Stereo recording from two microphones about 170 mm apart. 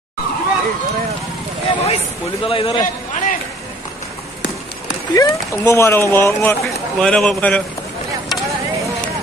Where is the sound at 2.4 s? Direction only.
35° left (ahead or behind).